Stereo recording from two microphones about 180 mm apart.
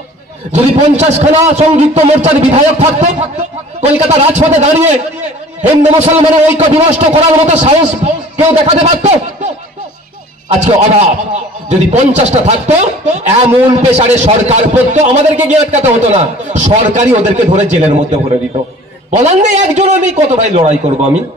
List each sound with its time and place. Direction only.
0.5 s a man's voice: 40° right (ahead or behind)
10.6 s a man's voice: 35° right (ahead or behind)
19.0 s a man's voice: 40° right (ahead or behind)